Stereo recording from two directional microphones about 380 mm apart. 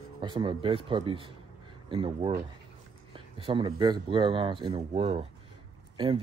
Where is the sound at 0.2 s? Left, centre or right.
Centre.